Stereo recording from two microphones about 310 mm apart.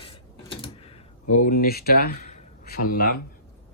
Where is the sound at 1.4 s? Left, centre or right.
Left.